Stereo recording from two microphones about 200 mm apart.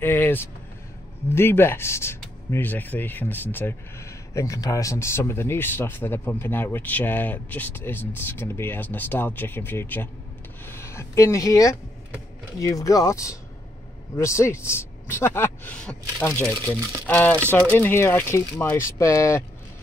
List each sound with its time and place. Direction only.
0.0 s vehicle: 10° left (ahead or behind)
1.3 s speech: 10° left (ahead or behind)